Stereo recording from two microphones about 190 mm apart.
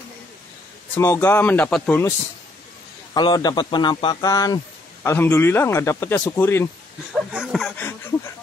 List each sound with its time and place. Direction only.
0.9 s speech: 10° left (ahead or behind)
3.2 s a man's voice: 20° left (ahead or behind)
7.2 s speech: centre (ahead or behind)